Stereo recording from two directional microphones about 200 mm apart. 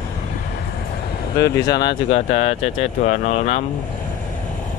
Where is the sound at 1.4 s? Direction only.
20° left (ahead or behind); by 3.6 s 35° left (ahead or behind).